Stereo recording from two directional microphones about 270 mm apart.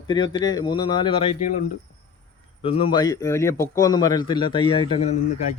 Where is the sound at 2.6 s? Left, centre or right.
Centre.